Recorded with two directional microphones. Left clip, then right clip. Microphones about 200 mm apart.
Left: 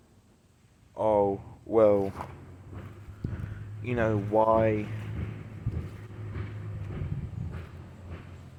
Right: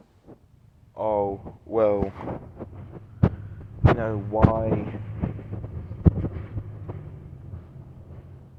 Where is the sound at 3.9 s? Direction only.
10° left (ahead or behind).